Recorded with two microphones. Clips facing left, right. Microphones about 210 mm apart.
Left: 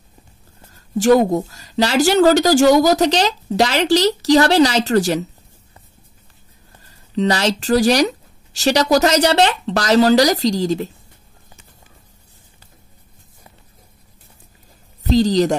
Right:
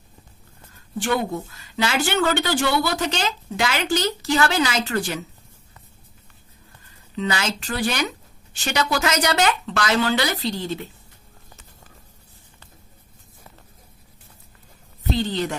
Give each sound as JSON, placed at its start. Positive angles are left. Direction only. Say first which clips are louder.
{"t": 0.9, "sound": "speech", "louder": "left 11 dB", "side_deg": 40}
{"t": 6.8, "sound": "speech", "louder": "left 8 dB", "side_deg": 35}
{"t": 15.1, "sound": "speech", "louder": "left 11 dB", "side_deg": 40}